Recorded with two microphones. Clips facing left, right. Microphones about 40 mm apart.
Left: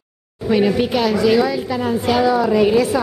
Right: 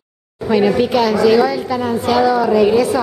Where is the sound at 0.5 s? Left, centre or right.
Centre.